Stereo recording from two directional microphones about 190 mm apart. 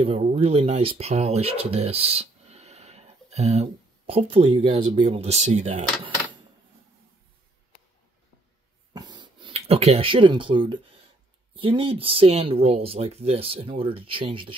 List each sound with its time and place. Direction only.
0.0 s speech: 30° right (ahead or behind)
8.9 s a sound: 25° right (ahead or behind)
11.5 s speech: 25° right (ahead or behind)